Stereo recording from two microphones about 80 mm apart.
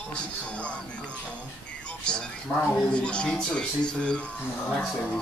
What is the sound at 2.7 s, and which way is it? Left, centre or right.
Speech, centre.